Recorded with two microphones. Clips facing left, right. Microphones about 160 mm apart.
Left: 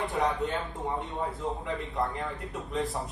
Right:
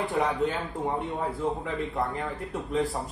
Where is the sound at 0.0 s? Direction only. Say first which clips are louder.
Right 3 dB; centre (ahead or behind).